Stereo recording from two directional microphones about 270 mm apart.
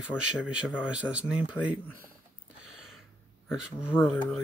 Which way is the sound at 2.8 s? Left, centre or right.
Centre.